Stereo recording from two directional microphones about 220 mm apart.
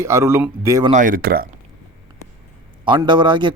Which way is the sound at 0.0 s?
10° right (ahead or behind).